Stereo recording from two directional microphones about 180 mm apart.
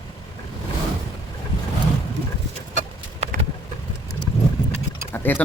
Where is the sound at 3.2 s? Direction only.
35° right (ahead or behind).